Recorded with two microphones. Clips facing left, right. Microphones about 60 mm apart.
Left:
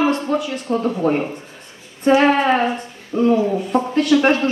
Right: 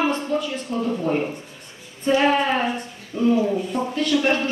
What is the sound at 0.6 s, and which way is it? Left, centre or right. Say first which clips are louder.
Speech: left 9 dB; left.